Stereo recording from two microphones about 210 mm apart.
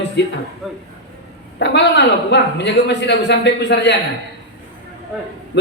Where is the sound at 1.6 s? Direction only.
55° left (ahead or behind).